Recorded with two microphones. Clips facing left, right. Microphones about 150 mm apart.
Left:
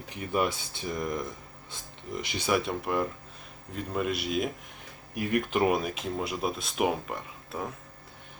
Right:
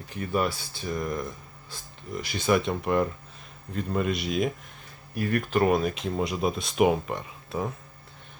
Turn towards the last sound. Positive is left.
turn(degrees=0)  # may be behind; listen again after turning